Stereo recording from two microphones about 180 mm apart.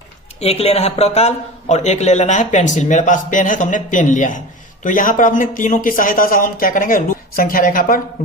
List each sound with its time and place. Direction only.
0.3 s a man's voice: 35° left (ahead or behind); by 8.0 s 50° left (ahead or behind)